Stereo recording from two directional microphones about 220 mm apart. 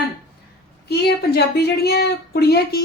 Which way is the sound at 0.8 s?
45° left (ahead or behind).